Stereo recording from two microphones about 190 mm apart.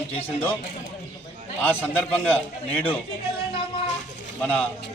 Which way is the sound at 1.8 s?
10° left (ahead or behind).